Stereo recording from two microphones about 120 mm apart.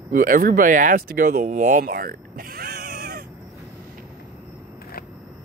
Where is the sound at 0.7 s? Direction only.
90° right.